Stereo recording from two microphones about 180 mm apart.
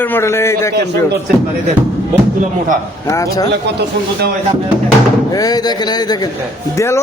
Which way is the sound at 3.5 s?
65° right (ahead or behind).